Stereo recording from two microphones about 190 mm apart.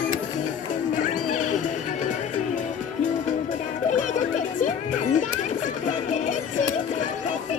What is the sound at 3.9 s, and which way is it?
Music, 40° left (ahead or behind).